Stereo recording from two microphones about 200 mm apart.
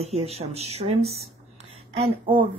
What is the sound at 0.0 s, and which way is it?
A woman's voice, 30° right (ahead or behind).